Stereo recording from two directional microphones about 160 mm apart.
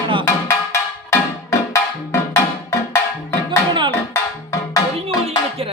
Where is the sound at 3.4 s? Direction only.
30° right (ahead or behind).